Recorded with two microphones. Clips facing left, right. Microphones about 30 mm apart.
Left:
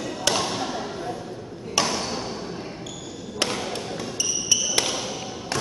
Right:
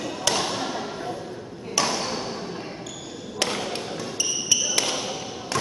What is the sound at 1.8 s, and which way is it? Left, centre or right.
Ping, centre.